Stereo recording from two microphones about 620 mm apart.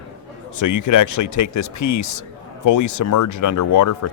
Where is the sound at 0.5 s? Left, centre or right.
Left.